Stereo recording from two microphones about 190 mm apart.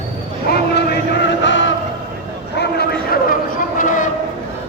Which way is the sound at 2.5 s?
60° left (ahead or behind).